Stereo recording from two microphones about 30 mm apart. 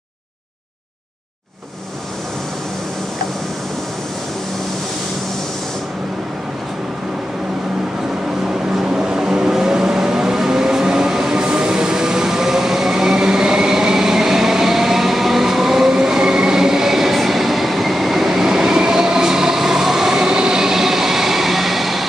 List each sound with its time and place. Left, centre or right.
8.8 s vehicle: right
15.9 s train: centre